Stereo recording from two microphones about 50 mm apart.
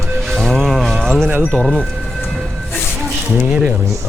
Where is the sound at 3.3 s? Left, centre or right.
Right.